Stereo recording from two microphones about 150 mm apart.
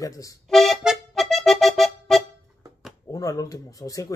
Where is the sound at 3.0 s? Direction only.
20° left (ahead or behind).